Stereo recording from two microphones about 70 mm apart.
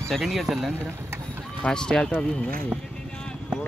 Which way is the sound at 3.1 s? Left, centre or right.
Centre.